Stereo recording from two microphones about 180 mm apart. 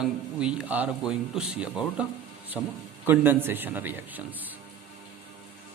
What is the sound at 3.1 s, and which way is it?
A man's voice, 10° right (ahead or behind).